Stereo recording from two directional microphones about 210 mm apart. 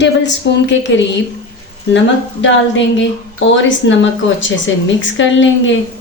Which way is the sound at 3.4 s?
60° left (ahead or behind).